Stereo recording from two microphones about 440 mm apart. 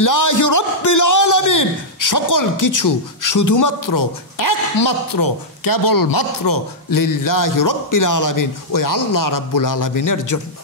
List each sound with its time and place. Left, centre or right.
0.0 s a man's voice: left